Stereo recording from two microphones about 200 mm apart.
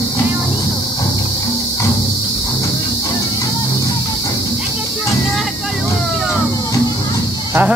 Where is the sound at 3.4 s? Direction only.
15° left (ahead or behind).